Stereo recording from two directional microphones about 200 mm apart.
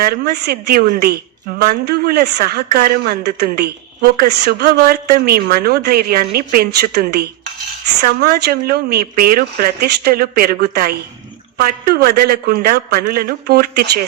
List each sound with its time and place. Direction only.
0.0 s speech: 50° right (ahead or behind)